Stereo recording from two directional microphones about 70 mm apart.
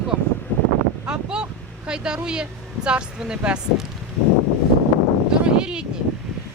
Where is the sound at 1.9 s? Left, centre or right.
Centre.